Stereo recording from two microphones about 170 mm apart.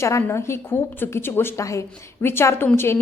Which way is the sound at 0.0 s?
15° left (ahead or behind).